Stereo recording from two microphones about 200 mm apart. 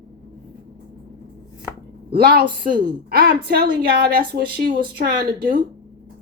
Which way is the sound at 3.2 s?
55° right (ahead or behind).